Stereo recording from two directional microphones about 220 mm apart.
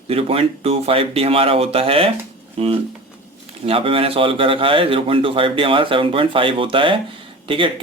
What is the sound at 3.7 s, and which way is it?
Speech, 25° right (ahead or behind).